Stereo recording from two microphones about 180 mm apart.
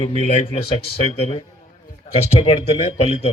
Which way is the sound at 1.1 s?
35° left (ahead or behind).